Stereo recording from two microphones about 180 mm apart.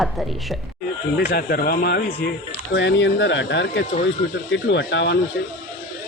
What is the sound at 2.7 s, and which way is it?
Speech, 80° left.